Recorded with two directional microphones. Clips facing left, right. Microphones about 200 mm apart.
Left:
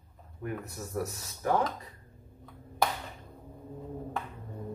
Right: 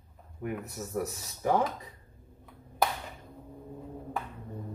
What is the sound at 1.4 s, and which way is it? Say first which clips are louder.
Speech: right 1 dB; 15° right (ahead or behind).